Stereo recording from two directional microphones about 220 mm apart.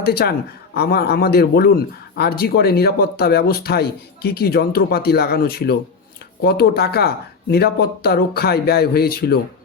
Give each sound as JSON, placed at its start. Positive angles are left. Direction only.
{"t": 0.0, "sound": "speech", "side_deg": 45}